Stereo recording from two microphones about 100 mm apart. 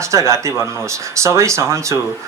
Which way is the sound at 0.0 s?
30° right (ahead or behind).